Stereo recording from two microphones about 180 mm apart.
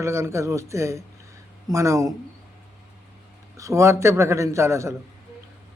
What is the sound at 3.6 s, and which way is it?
A man's voice, 15° right (ahead or behind).